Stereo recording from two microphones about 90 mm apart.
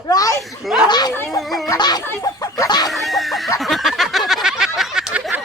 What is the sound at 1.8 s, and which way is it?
Speech, 50° left (ahead or behind).